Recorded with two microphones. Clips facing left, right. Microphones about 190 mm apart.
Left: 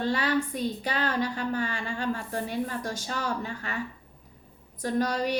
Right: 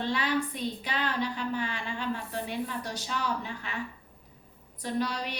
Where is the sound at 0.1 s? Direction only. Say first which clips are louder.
Left 3 dB; 40° left (ahead or behind).